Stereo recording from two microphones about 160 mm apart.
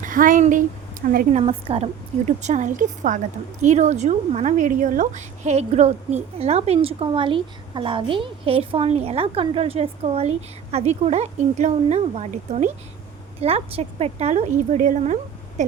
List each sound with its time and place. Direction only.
0.0 s a woman's voice: 60° right (ahead or behind)
1.3 s a woman's voice: 40° right (ahead or behind)